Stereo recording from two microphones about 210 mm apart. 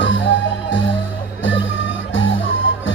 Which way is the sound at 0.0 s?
60° left (ahead or behind).